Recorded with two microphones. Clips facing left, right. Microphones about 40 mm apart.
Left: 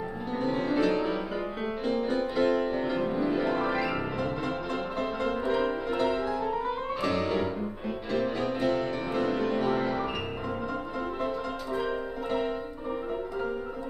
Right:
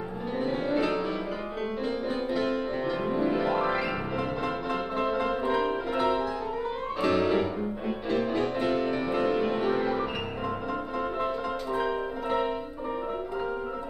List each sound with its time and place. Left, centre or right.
0.4 s music: centre
11.2 s music: centre